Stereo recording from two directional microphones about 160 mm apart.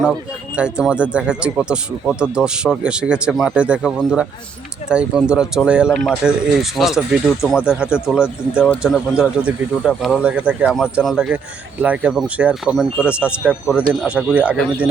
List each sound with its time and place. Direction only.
0.5 s speech: 5° right (ahead or behind)